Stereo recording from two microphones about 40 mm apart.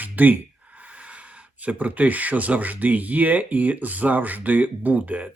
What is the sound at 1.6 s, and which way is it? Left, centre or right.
Speech, right.